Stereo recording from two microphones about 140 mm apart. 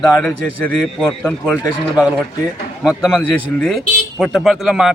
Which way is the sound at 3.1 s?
5° left (ahead or behind).